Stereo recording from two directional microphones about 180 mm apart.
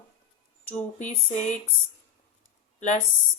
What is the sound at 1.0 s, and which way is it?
Speech, 45° left (ahead or behind).